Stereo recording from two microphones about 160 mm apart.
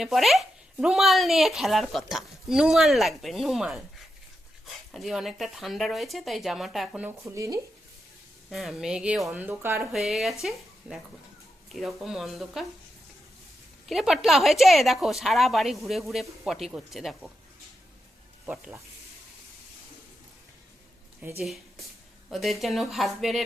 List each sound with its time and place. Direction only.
0.0 s speech: centre (ahead or behind)
7.3 s speech: 20° right (ahead or behind)
8.4 s speech: centre (ahead or behind)
9.9 s speech: centre (ahead or behind)
13.8 s speech: centre (ahead or behind)
18.4 s speech: 10° right (ahead or behind)
21.4 s speech: centre (ahead or behind)